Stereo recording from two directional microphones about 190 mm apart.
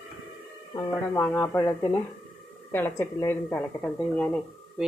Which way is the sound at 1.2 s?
10° left (ahead or behind).